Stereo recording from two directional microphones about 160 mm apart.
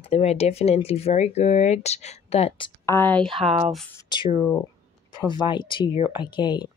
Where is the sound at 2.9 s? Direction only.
10° left (ahead or behind).